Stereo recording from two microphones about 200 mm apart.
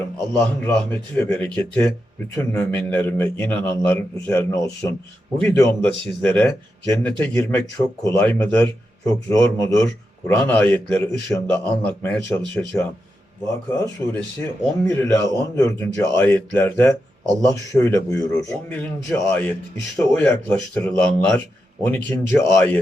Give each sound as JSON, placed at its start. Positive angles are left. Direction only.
{"t": 0.6, "sound": "speech", "side_deg": 10}
{"t": 13.5, "sound": "speech", "side_deg": 10}